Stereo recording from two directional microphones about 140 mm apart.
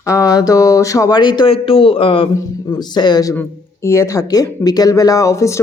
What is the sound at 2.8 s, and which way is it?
Speech, 30° left (ahead or behind).